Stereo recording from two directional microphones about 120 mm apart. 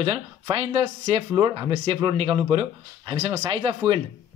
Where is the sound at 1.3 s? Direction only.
35° right (ahead or behind).